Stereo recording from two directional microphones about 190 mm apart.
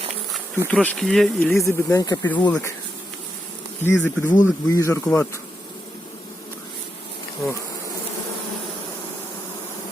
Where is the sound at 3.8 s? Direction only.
10° left (ahead or behind).